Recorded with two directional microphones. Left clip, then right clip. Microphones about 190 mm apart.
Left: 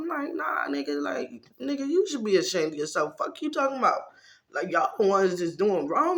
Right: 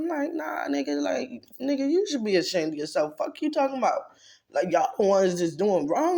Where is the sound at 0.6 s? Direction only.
35° right (ahead or behind).